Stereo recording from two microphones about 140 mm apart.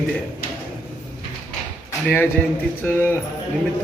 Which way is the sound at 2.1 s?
15° left (ahead or behind).